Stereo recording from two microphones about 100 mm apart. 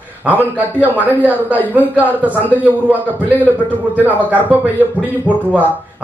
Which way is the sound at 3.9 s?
15° right (ahead or behind).